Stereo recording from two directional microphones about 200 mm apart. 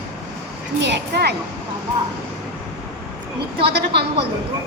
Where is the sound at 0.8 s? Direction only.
55° right (ahead or behind).